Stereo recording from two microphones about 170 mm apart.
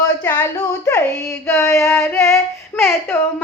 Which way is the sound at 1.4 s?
15° left (ahead or behind).